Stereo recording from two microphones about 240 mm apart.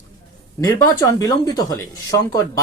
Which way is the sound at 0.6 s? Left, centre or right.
Centre.